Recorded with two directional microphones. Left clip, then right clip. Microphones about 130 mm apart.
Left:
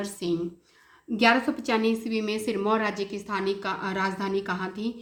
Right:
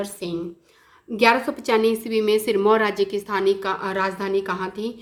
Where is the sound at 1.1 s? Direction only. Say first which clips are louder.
Right 4 dB; 40° right (ahead or behind).